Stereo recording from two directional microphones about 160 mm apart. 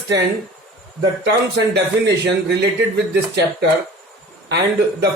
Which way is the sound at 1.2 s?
90° right.